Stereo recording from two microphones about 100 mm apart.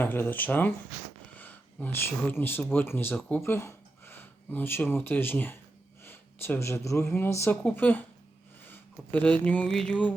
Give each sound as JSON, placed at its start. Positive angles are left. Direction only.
{"t": 0.0, "sound": "speech", "side_deg": 20}
{"t": 7.5, "sound": "speech", "side_deg": 15}
{"t": 9.7, "sound": "music", "side_deg": 10}